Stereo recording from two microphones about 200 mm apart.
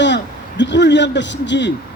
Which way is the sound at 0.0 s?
65° left (ahead or behind).